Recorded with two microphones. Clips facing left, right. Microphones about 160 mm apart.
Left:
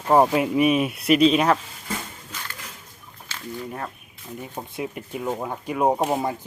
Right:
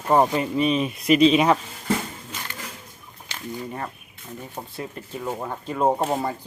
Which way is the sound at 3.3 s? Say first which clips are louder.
Right 2 dB; 15° right (ahead or behind).